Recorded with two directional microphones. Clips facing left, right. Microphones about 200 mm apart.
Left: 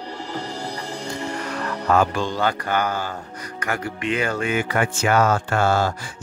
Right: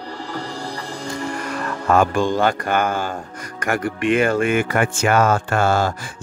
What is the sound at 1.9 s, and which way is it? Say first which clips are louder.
Speech: right 4 dB; 50° right (ahead or behind).